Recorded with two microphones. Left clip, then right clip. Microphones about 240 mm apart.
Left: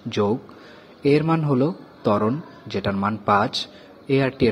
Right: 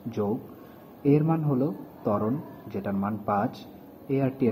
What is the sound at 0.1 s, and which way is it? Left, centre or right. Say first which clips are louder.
Speech: left 8 dB; left.